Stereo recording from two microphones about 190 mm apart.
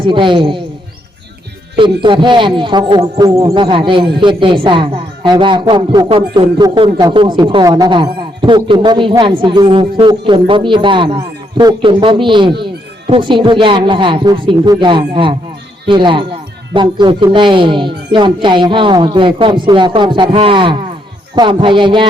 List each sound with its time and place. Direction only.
0.0 s a man's voice: 25° right (ahead or behind)
1.7 s a man's voice: 25° right (ahead or behind)